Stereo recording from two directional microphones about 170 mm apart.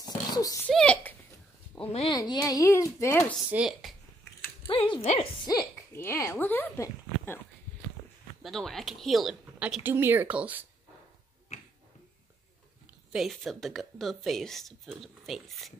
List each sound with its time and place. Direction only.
0.0 s oink: 20° left (ahead or behind)
0.7 s a sound: 5° left (ahead or behind)
1.8 s speech: 35° left (ahead or behind)
2.1 s a child's voice: 20° left (ahead or behind)
3.3 s a woman's voice: 5° right (ahead or behind)
4.6 s a child's voice: 30° left (ahead or behind)
5.5 s speech: 20° left (ahead or behind)
8.4 s a woman's voice: centre (ahead or behind)
13.1 s a woman's voice: centre (ahead or behind)